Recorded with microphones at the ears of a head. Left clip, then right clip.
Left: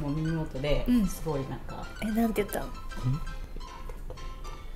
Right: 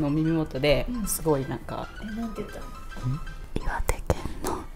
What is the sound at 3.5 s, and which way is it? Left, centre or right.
Whispering, right.